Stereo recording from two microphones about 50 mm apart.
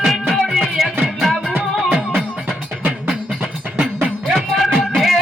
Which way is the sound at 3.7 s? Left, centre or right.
Centre.